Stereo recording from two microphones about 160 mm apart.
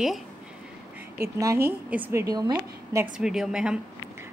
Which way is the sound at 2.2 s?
25° right (ahead or behind).